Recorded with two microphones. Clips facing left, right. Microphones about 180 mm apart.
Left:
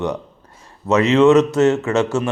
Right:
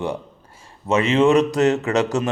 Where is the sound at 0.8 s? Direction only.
30° right (ahead or behind).